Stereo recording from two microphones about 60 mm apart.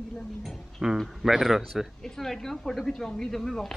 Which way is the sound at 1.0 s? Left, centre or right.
Centre.